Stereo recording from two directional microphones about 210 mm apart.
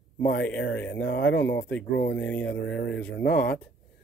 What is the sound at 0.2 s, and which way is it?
Speech, 50° left (ahead or behind).